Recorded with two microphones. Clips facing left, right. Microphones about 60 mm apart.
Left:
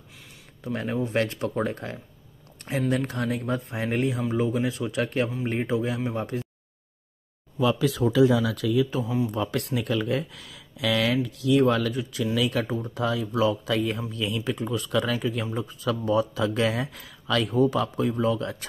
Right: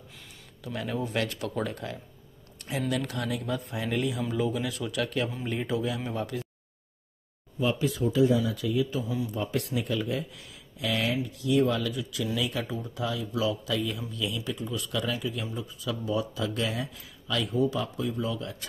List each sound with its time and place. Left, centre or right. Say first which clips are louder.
0.7 s speech: left 4 dB; left
7.5 s speech: left 4 dB; left
9.0 s speech: left 5 dB; left
9.3 s speech: left 3 dB; left
11.2 s speech: left 3 dB; left
12.4 s speech: left 7 dB; left
12.6 s speech: left 5 dB; left
12.9 s speech: left 5 dB; left